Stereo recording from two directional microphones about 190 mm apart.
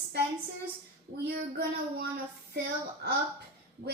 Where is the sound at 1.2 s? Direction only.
55° right (ahead or behind).